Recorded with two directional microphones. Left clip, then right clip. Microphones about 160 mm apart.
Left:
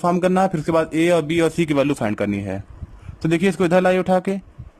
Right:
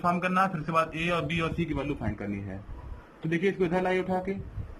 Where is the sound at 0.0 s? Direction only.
40° left (ahead or behind).